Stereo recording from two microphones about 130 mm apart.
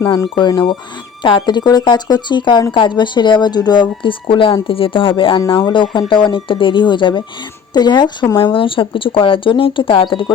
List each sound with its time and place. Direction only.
0.0 s speech: 30° left (ahead or behind)